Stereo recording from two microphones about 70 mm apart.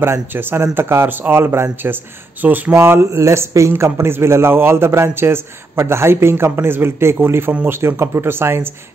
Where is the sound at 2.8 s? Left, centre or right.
Right.